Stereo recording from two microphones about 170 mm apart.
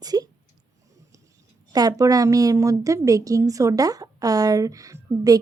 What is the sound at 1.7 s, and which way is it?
A woman's voice, 20° right (ahead or behind).